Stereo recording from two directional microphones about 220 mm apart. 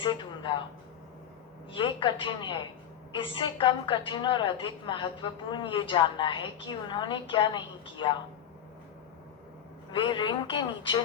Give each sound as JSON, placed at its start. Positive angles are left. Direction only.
{"t": 0.0, "sound": "a man's voice", "side_deg": 20}
{"t": 1.7, "sound": "a woman's voice", "side_deg": 20}
{"t": 9.9, "sound": "a woman's voice", "side_deg": 20}